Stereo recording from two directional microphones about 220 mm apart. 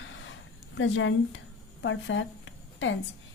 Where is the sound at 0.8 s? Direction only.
60° left (ahead or behind).